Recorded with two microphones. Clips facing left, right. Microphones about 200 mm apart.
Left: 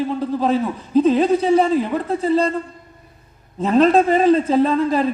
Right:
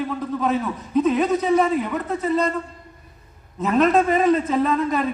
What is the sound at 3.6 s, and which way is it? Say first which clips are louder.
A man's voice: left 4 dB; 30° left (ahead or behind).